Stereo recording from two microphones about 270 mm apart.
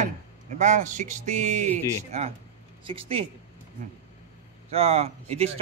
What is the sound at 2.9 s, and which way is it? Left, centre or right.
Speech, right.